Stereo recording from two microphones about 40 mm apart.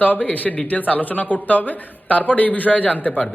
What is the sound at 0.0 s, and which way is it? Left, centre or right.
A man's voice, left.